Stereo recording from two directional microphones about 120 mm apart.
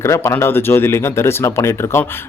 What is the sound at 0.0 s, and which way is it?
Speech, 25° left (ahead or behind).